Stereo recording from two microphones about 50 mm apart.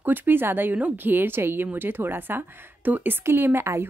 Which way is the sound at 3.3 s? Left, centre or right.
Right.